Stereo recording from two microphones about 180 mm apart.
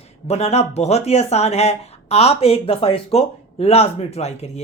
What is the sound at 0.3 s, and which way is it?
Speech, 35° left (ahead or behind).